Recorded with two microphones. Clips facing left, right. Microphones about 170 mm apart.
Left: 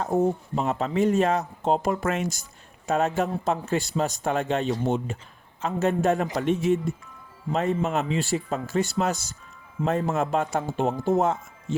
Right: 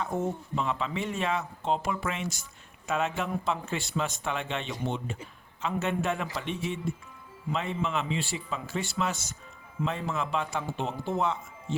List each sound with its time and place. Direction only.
0.0 s speech: 40° left (ahead or behind)